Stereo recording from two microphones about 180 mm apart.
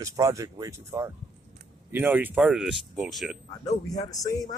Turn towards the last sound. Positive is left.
turn(degrees=20)  # may be behind; listen again after turning